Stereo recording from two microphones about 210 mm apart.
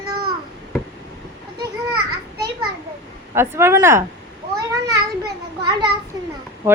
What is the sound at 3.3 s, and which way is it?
Speech, 10° right (ahead or behind).